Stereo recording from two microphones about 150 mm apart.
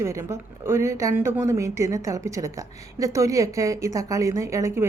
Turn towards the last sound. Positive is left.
turn(degrees=-20)  # may be behind; listen again after turning